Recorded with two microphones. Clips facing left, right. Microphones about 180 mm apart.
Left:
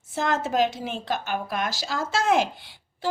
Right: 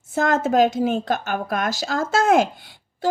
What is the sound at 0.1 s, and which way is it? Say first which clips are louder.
A woman's voice: right 6 dB; 50° right (ahead or behind).